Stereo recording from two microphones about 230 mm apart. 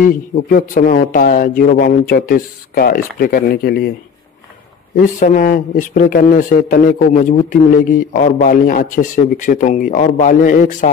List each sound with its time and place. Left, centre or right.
0.0 s speech: left
4.9 s speech: left